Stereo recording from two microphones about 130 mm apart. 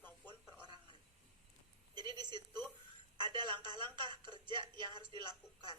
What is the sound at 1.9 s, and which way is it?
A woman's voice, 35° right (ahead or behind).